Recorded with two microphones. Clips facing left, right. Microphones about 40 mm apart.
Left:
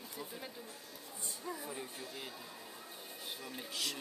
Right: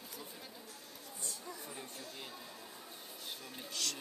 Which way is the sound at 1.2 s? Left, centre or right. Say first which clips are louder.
Left 5 dB; centre.